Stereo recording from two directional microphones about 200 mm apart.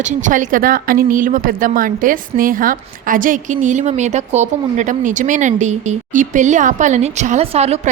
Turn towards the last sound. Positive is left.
turn(degrees=-30)  # may be behind; listen again after turning